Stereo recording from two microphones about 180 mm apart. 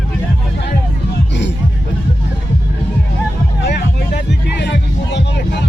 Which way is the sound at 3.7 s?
65° left (ahead or behind).